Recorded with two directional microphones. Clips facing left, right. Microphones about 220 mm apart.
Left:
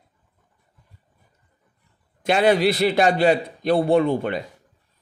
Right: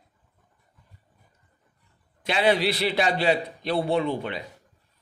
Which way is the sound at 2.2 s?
50° left (ahead or behind).